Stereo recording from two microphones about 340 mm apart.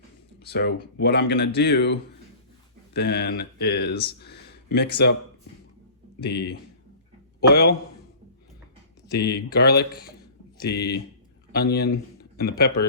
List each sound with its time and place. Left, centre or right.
0.4 s a man's voice: left
6.2 s a man's voice: left
9.1 s a man's voice: left